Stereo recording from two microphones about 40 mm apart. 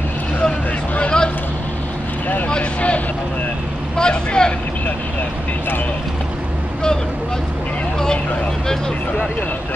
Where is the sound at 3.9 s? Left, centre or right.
Left.